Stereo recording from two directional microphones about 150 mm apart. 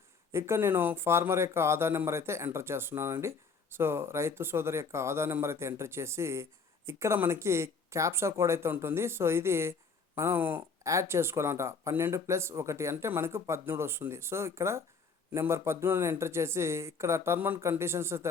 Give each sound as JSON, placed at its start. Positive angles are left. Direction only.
{"t": 0.3, "sound": "speech", "side_deg": -15}